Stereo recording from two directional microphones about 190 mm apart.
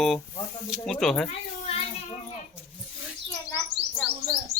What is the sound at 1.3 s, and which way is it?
Children playing, 30° left (ahead or behind).